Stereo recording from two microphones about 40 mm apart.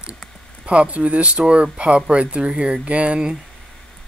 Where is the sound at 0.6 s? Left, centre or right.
Right.